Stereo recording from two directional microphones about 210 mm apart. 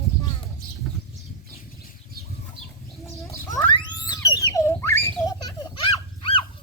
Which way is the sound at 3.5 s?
15° left (ahead or behind).